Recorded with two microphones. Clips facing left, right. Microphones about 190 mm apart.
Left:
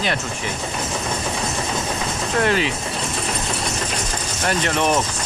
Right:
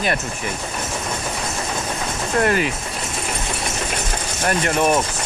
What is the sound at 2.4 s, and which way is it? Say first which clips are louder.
Speech: right 1 dB; 50° right (ahead or behind).